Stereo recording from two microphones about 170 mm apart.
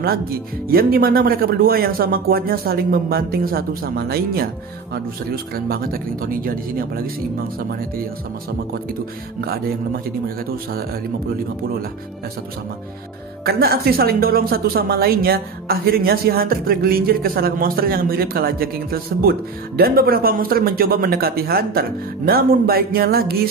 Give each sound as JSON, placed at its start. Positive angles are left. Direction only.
{"t": 0.0, "sound": "a woman's voice", "side_deg": -60}
{"t": 13.4, "sound": "a woman's voice", "side_deg": -65}